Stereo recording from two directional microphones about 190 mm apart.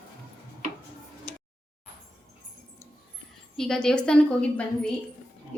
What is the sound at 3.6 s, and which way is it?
Speech, 5° left (ahead or behind).